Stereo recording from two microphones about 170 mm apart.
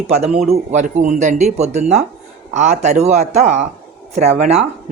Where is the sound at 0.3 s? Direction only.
50° right (ahead or behind).